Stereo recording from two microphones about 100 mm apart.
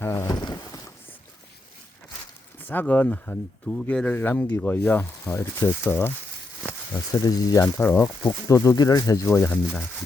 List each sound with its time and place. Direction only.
0.0 s a sound: 25° left (ahead or behind)
0.3 s a sound: 40° left (ahead or behind)
2.6 s speech: 20° left (ahead or behind)
5.3 s speech: 30° left (ahead or behind)
6.9 s speech: 35° left (ahead or behind)
7.8 s speech: 20° left (ahead or behind)
8.3 s speech: 35° left (ahead or behind)